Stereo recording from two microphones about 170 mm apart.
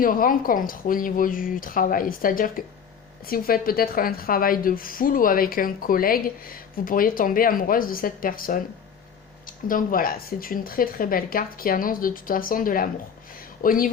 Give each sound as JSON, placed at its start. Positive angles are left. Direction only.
{"t": 0.0, "sound": "a woman's voice", "side_deg": 55}
{"t": 9.6, "sound": "a woman's voice", "side_deg": 55}